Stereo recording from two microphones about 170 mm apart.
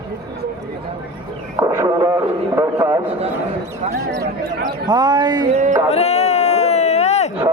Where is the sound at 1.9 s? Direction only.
15° right (ahead or behind).